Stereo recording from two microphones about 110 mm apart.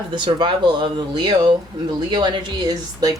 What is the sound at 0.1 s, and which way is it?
Speech, 45° right (ahead or behind).